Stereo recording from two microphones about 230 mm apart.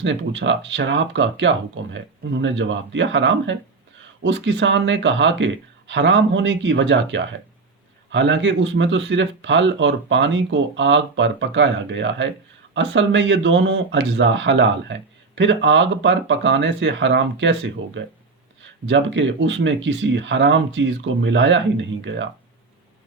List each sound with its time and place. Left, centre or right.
0.0 s speech: right